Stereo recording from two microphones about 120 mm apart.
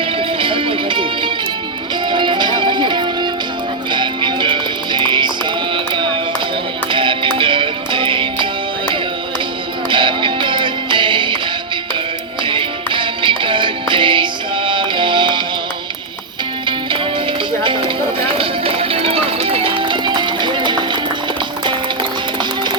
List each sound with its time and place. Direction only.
0.2 s music: 50° right (ahead or behind)
5.7 s a sound: 45° right (ahead or behind)
6.9 s music: 45° right (ahead or behind)
9.9 s music: 45° right (ahead or behind)
12.5 s music: 45° right (ahead or behind)
17.6 s music: 45° right (ahead or behind)